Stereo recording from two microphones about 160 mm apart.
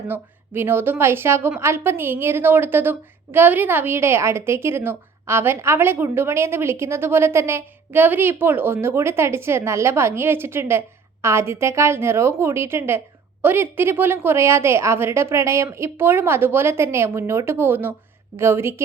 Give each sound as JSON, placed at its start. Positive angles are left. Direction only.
{"t": 0.1, "sound": "a woman's voice", "side_deg": -15}